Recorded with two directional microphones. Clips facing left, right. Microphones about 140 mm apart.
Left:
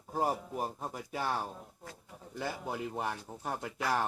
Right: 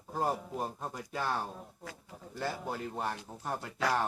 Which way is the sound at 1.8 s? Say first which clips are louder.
Right 2 dB; 90° right.